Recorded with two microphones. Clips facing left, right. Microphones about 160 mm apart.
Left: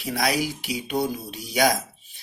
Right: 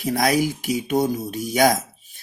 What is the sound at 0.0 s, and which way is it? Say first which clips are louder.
Speech: right 5 dB; 50° right (ahead or behind).